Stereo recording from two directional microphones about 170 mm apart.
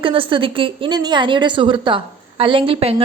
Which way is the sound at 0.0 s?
30° right (ahead or behind).